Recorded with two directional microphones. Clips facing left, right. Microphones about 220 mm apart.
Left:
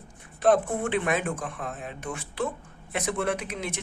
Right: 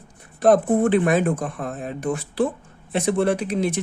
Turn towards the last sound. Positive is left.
turn(degrees=-35)  # may be behind; listen again after turning